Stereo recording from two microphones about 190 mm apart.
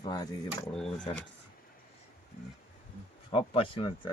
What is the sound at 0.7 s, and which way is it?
Speech, 5° left (ahead or behind).